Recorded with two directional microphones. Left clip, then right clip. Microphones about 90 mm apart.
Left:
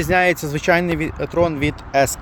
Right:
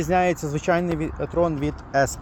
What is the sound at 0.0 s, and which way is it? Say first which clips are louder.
Speech: left 4 dB; 30° left (ahead or behind).